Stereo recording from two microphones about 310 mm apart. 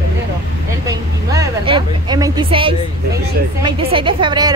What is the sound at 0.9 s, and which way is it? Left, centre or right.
A woman's voice, centre.